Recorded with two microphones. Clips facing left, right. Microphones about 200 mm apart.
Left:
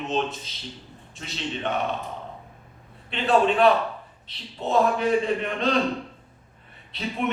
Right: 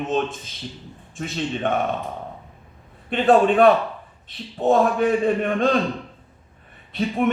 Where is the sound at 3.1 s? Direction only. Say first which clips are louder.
Right 5 dB; 50° right (ahead or behind).